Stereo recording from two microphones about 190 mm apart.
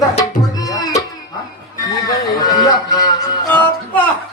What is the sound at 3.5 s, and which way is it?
Speech, 10° left (ahead or behind).